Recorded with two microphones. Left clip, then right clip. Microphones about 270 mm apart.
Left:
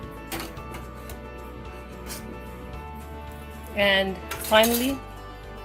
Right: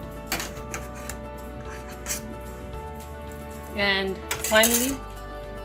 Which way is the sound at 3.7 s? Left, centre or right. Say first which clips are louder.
Left 3 dB; left.